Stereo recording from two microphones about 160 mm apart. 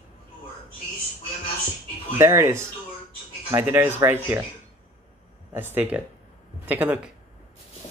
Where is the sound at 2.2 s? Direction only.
15° right (ahead or behind).